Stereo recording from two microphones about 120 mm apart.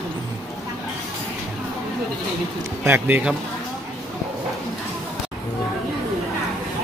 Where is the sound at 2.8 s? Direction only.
15° right (ahead or behind).